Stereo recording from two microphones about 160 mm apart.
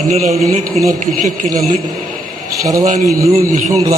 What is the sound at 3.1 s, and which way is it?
Speech, 20° right (ahead or behind).